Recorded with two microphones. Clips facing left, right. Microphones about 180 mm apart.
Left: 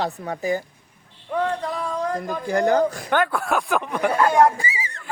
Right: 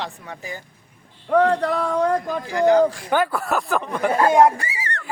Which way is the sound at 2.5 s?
50° left (ahead or behind).